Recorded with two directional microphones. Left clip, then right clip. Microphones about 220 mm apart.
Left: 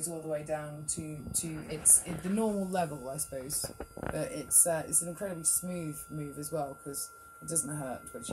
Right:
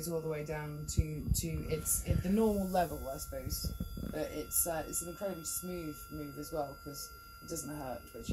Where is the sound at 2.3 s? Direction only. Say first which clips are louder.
Right 1 dB; 45° left (ahead or behind).